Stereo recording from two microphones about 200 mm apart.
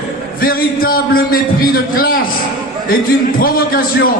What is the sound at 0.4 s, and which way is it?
A man's voice, 45° left (ahead or behind).